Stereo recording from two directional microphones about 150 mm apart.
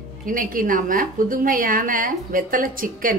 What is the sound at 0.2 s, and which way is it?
A woman's voice, 65° right (ahead or behind).